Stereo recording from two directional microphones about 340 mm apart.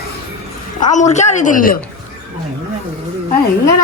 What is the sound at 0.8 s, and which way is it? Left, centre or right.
Speech, left.